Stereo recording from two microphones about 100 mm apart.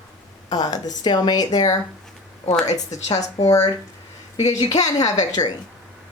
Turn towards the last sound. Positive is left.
turn(degrees=40)  # may be behind; listen again after turning